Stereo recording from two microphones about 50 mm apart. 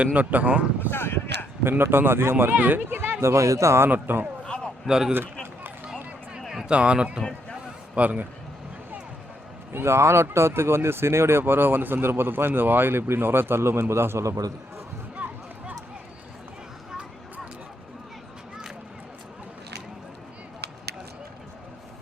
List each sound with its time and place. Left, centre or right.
0.0 s speech: right
0.9 s speech: left
1.8 s speech: right
2.3 s speech: right
3.2 s speech: right
3.8 s speech: right
4.4 s a sound: centre
4.9 s speech: centre
6.7 s speech: right
9.7 s speech: right
15.1 s a sound: right